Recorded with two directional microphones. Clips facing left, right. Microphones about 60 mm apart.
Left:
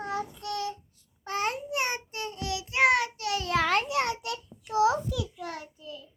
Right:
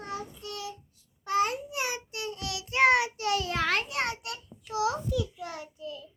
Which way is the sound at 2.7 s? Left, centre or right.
Centre.